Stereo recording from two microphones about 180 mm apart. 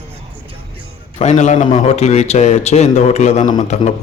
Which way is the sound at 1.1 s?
40° left (ahead or behind).